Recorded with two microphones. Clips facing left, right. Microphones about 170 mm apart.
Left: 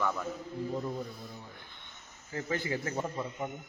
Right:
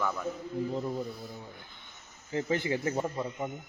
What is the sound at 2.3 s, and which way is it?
Speech, 20° right (ahead or behind).